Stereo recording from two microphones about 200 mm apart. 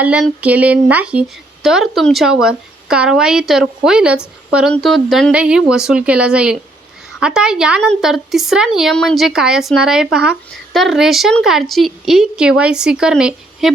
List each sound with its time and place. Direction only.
0.0 s speech: 5° right (ahead or behind)